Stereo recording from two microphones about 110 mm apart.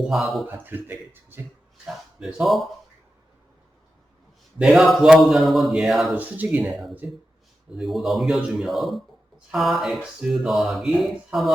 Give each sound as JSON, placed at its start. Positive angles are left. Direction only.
{"t": 0.0, "sound": "a man's voice", "side_deg": 0}
{"t": 0.4, "sound": "speech", "side_deg": -15}
{"t": 1.9, "sound": "a man's voice", "side_deg": -5}
{"t": 4.6, "sound": "a man's voice", "side_deg": 0}
{"t": 6.1, "sound": "speech", "side_deg": -15}
{"t": 7.8, "sound": "a man's voice", "side_deg": 0}